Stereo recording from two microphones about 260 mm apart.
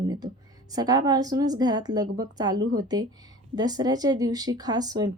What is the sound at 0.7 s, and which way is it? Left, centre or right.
A woman's voice, centre.